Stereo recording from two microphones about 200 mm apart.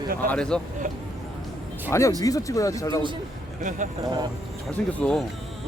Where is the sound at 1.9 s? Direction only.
15° left (ahead or behind).